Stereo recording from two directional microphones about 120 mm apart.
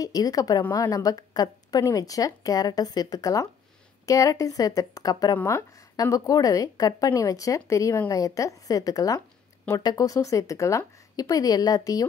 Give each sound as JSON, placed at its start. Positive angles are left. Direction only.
{"t": 0.0, "sound": "speech", "side_deg": 30}